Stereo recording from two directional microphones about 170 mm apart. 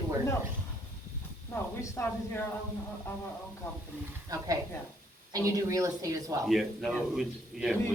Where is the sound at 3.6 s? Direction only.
15° left (ahead or behind).